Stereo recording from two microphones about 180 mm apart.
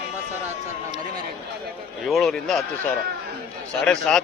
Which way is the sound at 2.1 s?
Centre (ahead or behind).